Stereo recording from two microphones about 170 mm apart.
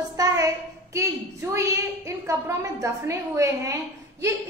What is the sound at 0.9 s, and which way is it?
A woman's voice, 15° right (ahead or behind).